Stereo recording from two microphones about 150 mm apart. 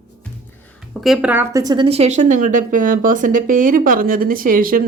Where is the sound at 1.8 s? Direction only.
45° right (ahead or behind).